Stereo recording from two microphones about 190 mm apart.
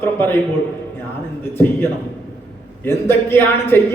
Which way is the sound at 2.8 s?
10° left (ahead or behind).